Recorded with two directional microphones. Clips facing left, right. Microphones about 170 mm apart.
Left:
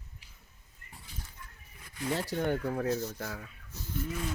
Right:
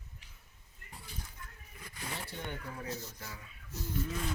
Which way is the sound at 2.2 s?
90° left.